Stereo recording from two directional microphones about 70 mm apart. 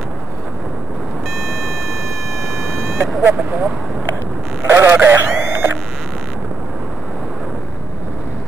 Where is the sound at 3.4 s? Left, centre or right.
Centre.